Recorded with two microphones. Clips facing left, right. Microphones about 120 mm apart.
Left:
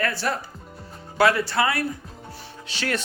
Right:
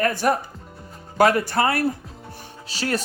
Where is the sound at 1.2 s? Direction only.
45° right (ahead or behind).